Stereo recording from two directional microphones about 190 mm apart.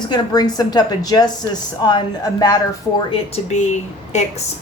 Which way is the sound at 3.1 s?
35° left (ahead or behind).